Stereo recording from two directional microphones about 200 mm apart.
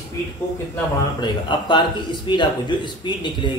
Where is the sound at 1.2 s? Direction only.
25° left (ahead or behind).